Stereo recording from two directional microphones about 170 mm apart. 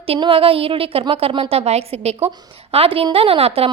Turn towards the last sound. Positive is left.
turn(degrees=-35)  # may be behind; listen again after turning